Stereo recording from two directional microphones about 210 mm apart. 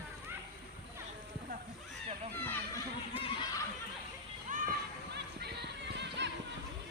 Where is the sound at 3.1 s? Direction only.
25° left (ahead or behind).